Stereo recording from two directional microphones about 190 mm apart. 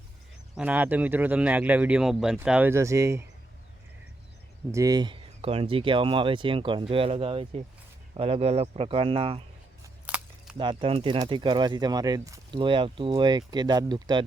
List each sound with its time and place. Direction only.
0.5 s speech: 10° right (ahead or behind)
4.7 s speech: 20° right (ahead or behind)
9.8 s a sound: 5° right (ahead or behind)
10.6 s speech: 25° right (ahead or behind)